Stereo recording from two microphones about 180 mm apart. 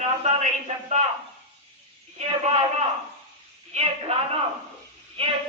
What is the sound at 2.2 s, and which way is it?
A man's voice, 35° right (ahead or behind).